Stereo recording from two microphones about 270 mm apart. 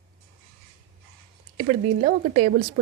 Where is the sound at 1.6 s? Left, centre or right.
Right.